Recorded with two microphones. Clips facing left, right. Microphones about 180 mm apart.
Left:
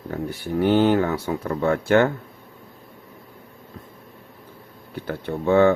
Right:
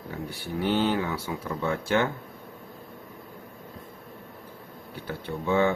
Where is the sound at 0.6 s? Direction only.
50° left (ahead or behind).